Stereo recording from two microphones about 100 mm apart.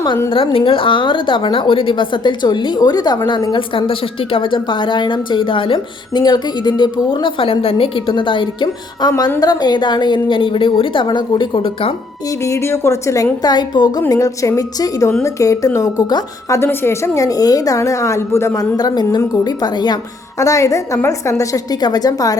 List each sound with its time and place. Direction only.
0.5 s a woman's voice: 60° left (ahead or behind)
6.2 s a woman's voice: 45° left (ahead or behind); by 11.9 s 65° left (ahead or behind)
12.5 s a woman's voice: 30° left (ahead or behind)
13.4 s a woman's voice: 45° left (ahead or behind)
14.1 s a woman's voice: 35° left (ahead or behind)
16.6 s a woman's voice: 25° left (ahead or behind)
18.8 s a woman's voice: 45° left (ahead or behind)
20.4 s a woman's voice: 35° left (ahead or behind)